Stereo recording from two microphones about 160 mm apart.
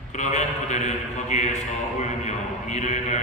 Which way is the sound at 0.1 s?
45° left (ahead or behind).